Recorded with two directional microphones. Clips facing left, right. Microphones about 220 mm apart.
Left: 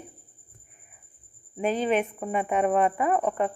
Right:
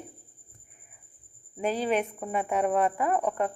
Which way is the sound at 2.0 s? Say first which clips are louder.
Left 2 dB; 5° left (ahead or behind).